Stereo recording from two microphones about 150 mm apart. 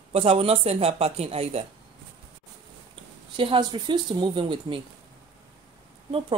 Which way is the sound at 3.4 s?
30° right (ahead or behind).